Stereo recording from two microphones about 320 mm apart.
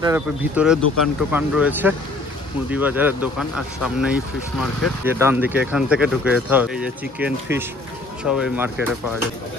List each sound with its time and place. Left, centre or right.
0.0 s speech: centre